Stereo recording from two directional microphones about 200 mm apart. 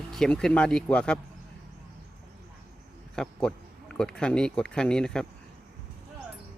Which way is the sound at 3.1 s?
5° left (ahead or behind).